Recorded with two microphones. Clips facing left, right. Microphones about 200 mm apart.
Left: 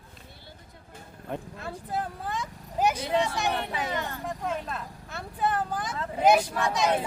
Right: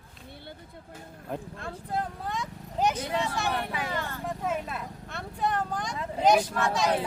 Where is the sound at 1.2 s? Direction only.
Centre (ahead or behind); by 4.1 s 20° left (ahead or behind).